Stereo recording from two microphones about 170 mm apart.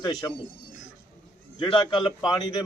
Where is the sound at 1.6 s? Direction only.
25° left (ahead or behind).